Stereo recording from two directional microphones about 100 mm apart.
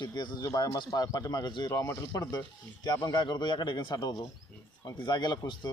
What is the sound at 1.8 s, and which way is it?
Speech, 25° left (ahead or behind).